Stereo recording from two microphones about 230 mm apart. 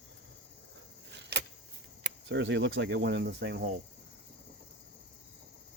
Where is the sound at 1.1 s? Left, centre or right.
Right.